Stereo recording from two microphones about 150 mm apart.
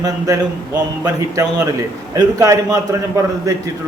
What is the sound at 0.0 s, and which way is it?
A man's voice, 25° right (ahead or behind).